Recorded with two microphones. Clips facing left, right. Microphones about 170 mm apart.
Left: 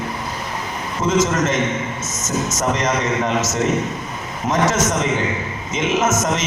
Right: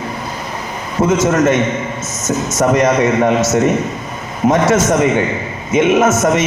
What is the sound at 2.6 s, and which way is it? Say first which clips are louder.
Speech: right 10 dB; 60° right (ahead or behind).